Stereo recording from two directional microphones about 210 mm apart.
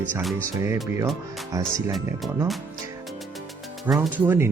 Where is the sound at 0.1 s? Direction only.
Centre (ahead or behind).